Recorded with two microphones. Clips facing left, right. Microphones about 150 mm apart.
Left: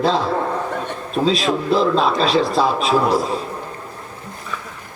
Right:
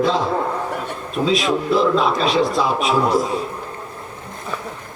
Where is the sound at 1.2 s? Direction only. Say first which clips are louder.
Even; 30° left (ahead or behind).